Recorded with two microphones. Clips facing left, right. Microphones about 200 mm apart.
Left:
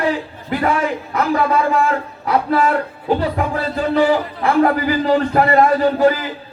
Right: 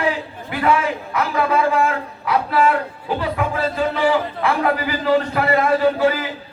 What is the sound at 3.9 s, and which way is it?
A man's voice, 45° left (ahead or behind).